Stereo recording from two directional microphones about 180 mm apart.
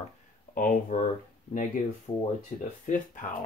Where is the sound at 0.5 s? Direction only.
50° left (ahead or behind).